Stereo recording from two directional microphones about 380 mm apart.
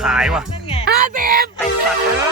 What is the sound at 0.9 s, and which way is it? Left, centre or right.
Speech, right.